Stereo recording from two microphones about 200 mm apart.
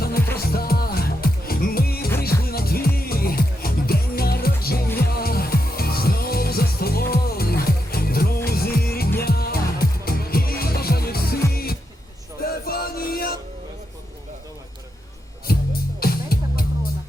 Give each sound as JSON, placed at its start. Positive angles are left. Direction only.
{"t": 0.3, "sound": "music", "side_deg": 50}
{"t": 16.0, "sound": "music", "side_deg": 50}